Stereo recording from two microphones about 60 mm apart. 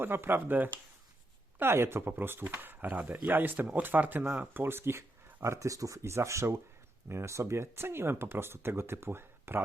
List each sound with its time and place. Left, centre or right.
0.0 s speech: right
1.5 s speech: right